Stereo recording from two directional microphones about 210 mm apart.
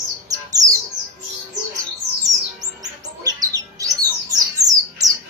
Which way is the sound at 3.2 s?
15° right (ahead or behind).